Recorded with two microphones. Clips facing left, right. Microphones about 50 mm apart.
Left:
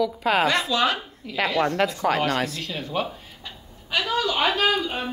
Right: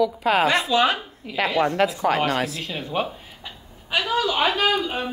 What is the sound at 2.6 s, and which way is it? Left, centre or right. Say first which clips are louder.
A woman's voice: right 1 dB; centre.